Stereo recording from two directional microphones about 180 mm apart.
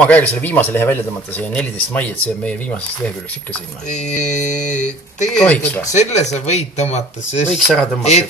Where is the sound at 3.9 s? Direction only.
40° left (ahead or behind).